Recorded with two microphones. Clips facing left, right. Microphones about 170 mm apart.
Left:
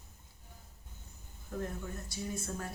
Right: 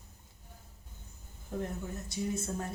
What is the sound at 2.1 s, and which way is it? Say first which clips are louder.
Speech: right 6 dB; 25° right (ahead or behind).